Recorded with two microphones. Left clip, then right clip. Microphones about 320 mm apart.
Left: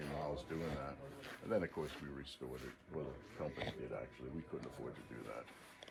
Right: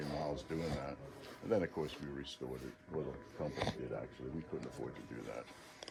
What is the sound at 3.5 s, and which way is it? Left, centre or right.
Speech, centre.